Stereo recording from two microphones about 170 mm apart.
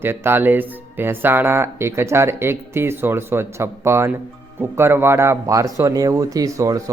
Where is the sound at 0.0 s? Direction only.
15° right (ahead or behind).